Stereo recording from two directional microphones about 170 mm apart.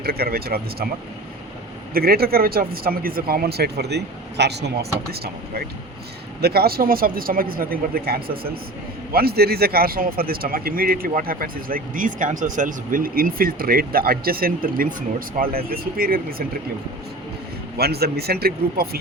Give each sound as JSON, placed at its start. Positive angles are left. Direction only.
{"t": 0.0, "sound": "speech", "side_deg": -65}
{"t": 1.9, "sound": "speech", "side_deg": -60}
{"t": 17.7, "sound": "speech", "side_deg": -65}